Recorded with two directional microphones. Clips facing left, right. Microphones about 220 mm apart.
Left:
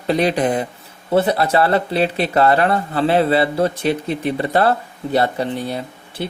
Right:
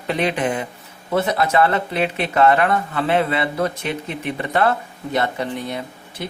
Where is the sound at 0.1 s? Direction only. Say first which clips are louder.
Left 4 dB; 35° left (ahead or behind).